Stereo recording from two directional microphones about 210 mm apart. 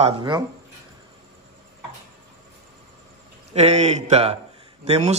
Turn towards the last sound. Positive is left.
turn(degrees=-30)  # may be behind; listen again after turning